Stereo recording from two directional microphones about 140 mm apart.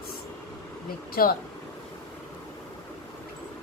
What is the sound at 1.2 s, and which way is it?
Speech, 90° left.